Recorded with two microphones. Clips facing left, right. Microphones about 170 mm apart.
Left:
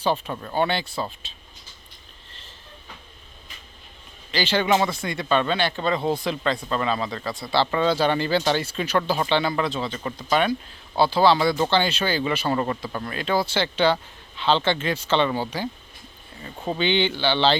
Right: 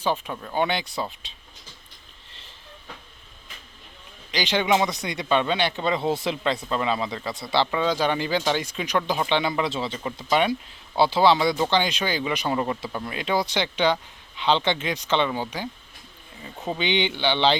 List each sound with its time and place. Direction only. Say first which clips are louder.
0.0 s speech: left 2 dB; 10° right (ahead or behind)
4.3 s speech: left 1 dB; 15° right (ahead or behind)
7.7 s speech: left 2 dB; 10° right (ahead or behind)
9.6 s speech: left 1 dB; 25° right (ahead or behind)